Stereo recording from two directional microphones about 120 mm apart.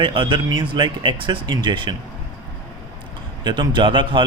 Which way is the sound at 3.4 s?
40° right (ahead or behind).